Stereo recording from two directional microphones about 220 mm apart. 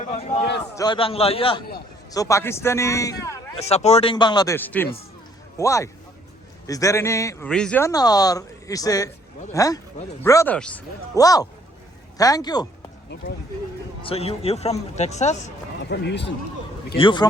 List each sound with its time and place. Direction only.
0.8 s speech: 20° left (ahead or behind)
2.1 s speech: 15° left (ahead or behind)
3.6 s speech: 30° left (ahead or behind)
14.0 s speech: 25° left (ahead or behind)
15.9 s a man's voice: 50° left (ahead or behind)
17.0 s speech: 20° left (ahead or behind)